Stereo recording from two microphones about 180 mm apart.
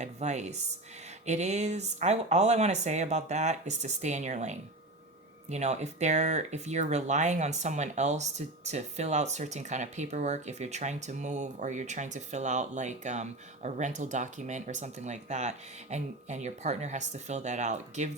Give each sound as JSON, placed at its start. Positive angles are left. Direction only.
{"t": 0.0, "sound": "speech", "side_deg": -40}